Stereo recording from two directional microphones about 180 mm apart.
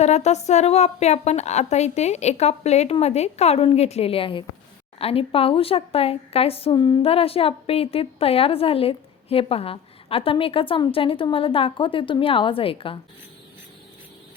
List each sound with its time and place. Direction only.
0.0 s speech: 40° left (ahead or behind)